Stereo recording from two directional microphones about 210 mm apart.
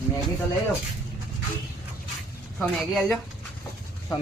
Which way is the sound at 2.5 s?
Centre (ahead or behind).